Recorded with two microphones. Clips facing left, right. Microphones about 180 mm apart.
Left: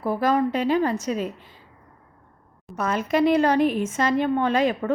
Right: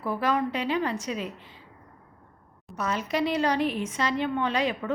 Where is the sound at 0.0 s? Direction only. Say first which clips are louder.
Left 5 dB; 40° left (ahead or behind).